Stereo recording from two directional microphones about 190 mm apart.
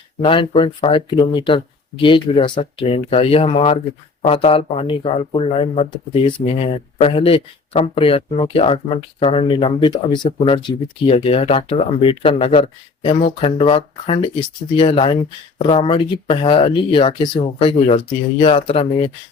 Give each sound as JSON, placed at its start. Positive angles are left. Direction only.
{"t": 0.2, "sound": "speech", "side_deg": 25}